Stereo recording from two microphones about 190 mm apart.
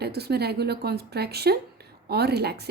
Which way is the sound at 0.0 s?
55° right (ahead or behind).